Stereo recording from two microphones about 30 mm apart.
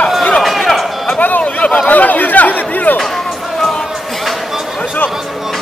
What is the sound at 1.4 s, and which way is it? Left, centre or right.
Speech, left.